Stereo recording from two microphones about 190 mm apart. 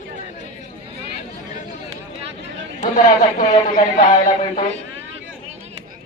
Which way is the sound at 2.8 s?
35° left (ahead or behind).